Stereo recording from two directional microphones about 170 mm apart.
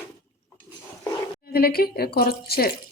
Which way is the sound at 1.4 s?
65° left (ahead or behind).